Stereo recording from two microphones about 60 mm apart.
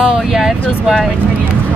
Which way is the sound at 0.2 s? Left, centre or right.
Centre.